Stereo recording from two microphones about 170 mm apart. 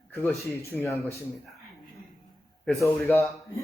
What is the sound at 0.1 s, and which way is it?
Speech, centre (ahead or behind).